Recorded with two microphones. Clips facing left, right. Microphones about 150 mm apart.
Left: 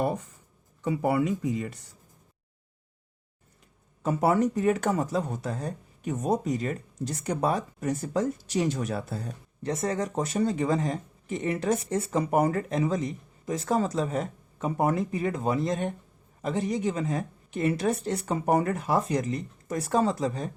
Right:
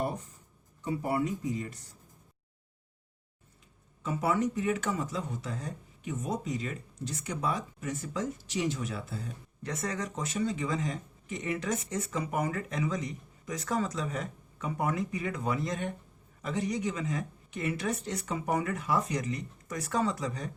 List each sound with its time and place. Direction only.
0.8 s speech: 90° left; by 1.8 s 70° left (ahead or behind)
4.0 s speech: 40° left (ahead or behind)
5.6 s speech: 60° left (ahead or behind)
6.4 s speech: 45° left (ahead or behind)
9.6 s speech: 30° left (ahead or behind)